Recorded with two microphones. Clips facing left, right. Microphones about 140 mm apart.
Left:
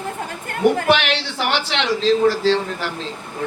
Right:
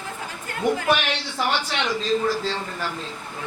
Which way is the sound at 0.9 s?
85° left.